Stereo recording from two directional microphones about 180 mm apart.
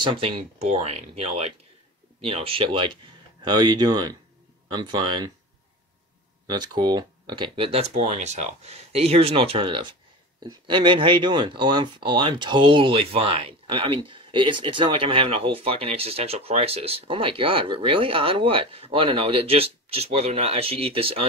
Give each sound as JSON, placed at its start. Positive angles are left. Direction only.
{"t": 0.0, "sound": "speech", "side_deg": -30}
{"t": 6.5, "sound": "speech", "side_deg": -25}